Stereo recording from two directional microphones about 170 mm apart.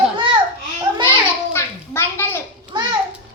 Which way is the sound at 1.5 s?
15° left (ahead or behind).